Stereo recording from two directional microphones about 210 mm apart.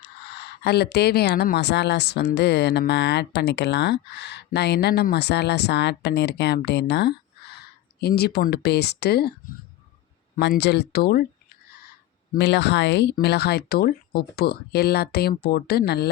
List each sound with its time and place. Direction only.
0.0 s speech: 55° left (ahead or behind)
10.3 s speech: 45° left (ahead or behind)
12.3 s speech: 55° left (ahead or behind)